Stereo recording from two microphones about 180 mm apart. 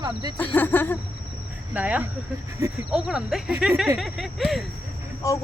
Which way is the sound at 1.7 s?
10° right (ahead or behind).